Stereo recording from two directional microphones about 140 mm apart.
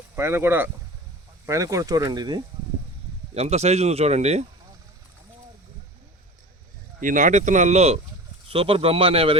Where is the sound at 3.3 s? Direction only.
50° right (ahead or behind).